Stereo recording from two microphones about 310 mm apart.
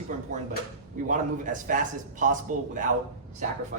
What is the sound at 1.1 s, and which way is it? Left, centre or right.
A man's voice, right.